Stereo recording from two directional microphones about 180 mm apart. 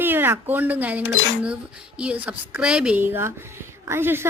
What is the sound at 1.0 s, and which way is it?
Speech, 90° left.